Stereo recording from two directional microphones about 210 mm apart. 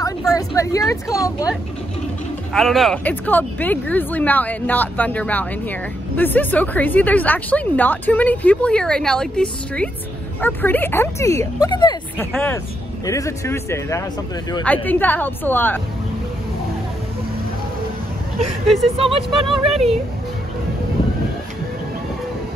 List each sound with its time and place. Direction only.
0.3 s speech: 15° left (ahead or behind)
2.5 s speech: centre (ahead or behind); by 12.0 s 20° left (ahead or behind)
12.3 s speech: 5° left (ahead or behind)
18.9 s music: 25° right (ahead or behind)